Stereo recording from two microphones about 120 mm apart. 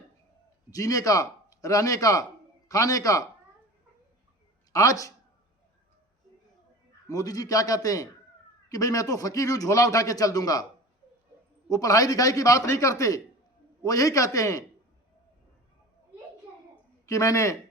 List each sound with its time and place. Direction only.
0.7 s a man's voice: 30° left (ahead or behind)
4.7 s speech: 30° left (ahead or behind)
7.1 s a man's voice: 30° left (ahead or behind)
11.7 s a man's voice: 30° left (ahead or behind)
17.1 s a man's voice: 25° left (ahead or behind)